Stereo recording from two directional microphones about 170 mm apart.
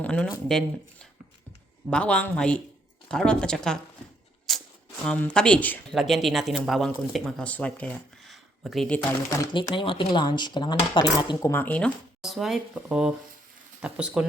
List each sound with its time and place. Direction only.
0.0 s speech: 5° left (ahead or behind)
4.5 s a sound: centre (ahead or behind)
5.0 s speech: 5° left (ahead or behind)
5.9 s speech: centre (ahead or behind)
9.4 s speech: 25° left (ahead or behind)
11.5 s speech: 10° left (ahead or behind)
12.2 s speech: centre (ahead or behind)